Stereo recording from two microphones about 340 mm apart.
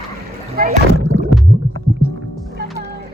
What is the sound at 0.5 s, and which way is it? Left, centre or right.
Speech, right.